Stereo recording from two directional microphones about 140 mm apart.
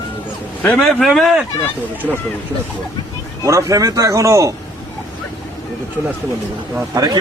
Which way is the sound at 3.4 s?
25° right (ahead or behind).